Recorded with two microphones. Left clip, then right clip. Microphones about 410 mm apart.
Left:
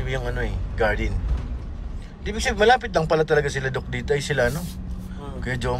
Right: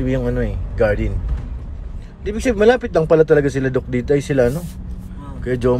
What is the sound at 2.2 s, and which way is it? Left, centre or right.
Speech, centre.